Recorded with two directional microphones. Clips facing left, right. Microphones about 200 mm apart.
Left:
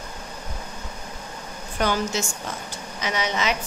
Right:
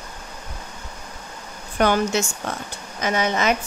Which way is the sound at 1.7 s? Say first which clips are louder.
Right 5 dB; 60° right (ahead or behind).